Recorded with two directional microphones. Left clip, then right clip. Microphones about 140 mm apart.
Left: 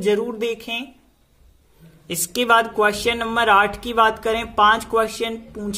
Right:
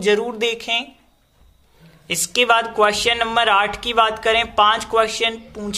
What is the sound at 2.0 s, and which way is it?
Speech, 35° left (ahead or behind).